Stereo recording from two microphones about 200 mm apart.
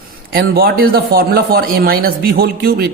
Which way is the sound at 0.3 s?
50° right (ahead or behind).